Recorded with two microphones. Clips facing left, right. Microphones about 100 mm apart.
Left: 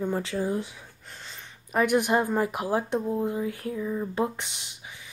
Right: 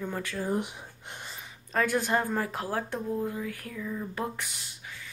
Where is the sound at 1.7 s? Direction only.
15° left (ahead or behind).